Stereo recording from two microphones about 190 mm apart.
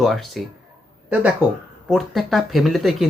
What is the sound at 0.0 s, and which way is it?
Speech, centre (ahead or behind).